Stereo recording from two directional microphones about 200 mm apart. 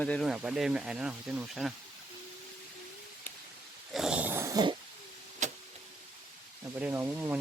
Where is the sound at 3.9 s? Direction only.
5° right (ahead or behind); by 4.7 s 20° right (ahead or behind).